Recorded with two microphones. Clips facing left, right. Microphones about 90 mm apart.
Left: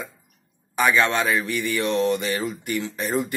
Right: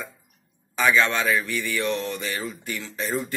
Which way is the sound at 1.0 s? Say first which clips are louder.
Left 2 dB; 50° left (ahead or behind).